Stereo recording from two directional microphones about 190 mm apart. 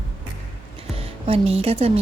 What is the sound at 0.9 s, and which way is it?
Speech, 30° right (ahead or behind).